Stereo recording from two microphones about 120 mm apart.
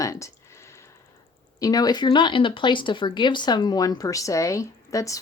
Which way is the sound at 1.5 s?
30° left (ahead or behind).